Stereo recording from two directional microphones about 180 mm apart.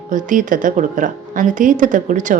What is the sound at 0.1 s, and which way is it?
A woman's voice, 45° right (ahead or behind).